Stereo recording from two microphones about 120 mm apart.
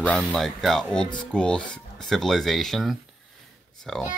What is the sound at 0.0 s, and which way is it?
Speech, 10° left (ahead or behind).